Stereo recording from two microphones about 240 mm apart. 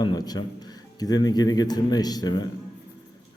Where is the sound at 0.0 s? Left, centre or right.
Centre.